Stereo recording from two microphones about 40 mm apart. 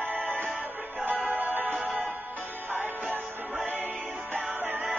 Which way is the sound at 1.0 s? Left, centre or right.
Right.